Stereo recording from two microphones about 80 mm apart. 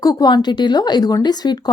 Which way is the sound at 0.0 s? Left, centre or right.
Left.